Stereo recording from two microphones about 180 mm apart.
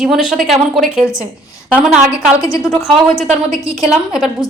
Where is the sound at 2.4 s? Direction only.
15° left (ahead or behind).